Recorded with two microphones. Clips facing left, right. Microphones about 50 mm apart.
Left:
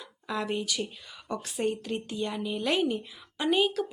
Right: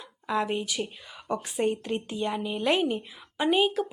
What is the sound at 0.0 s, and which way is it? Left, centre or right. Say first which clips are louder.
Speech: right 5 dB; centre.